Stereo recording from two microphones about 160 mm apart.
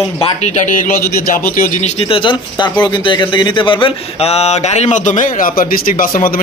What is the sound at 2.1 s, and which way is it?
Speech, 30° left (ahead or behind).